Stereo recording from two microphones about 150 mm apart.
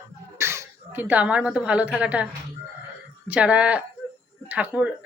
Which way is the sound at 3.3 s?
10° right (ahead or behind).